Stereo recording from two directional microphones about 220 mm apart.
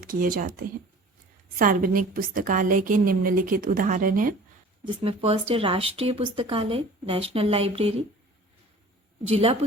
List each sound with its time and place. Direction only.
0.0 s a woman's voice: 40° right (ahead or behind)
5.0 s speech: 25° right (ahead or behind)
9.2 s speech: 25° right (ahead or behind)